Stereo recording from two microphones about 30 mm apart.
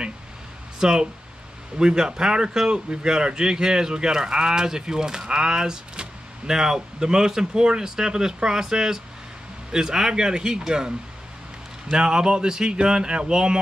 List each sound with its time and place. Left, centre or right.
0.7 s speech: right